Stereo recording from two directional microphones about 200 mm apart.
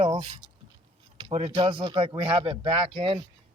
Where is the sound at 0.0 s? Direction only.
30° right (ahead or behind).